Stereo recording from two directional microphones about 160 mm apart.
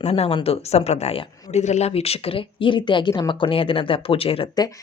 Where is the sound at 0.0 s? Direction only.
40° left (ahead or behind).